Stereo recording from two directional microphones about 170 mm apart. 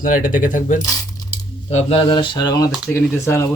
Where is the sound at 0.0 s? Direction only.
55° left (ahead or behind).